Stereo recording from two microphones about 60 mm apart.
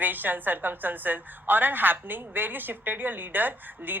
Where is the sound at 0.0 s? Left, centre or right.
Right.